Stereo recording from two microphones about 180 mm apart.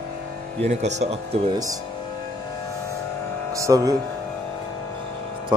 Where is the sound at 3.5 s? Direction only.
20° right (ahead or behind).